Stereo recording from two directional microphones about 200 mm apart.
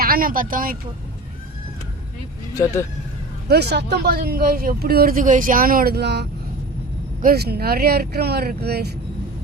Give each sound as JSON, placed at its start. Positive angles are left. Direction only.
{"t": 0.0, "sound": "speech", "side_deg": -45}
{"t": 3.5, "sound": "speech", "side_deg": -55}